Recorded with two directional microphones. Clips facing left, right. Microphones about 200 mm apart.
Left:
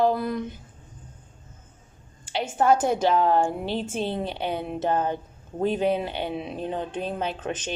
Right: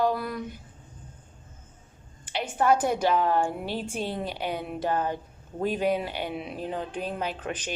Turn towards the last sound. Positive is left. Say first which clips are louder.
# left 3 dB
turn(degrees=25)  # may be behind; listen again after turning